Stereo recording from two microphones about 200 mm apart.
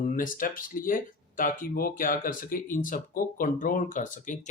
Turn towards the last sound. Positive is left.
turn(degrees=40)  # may be behind; listen again after turning